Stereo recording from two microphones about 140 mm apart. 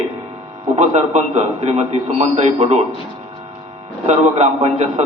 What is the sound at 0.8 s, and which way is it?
A man's voice, 55° right (ahead or behind).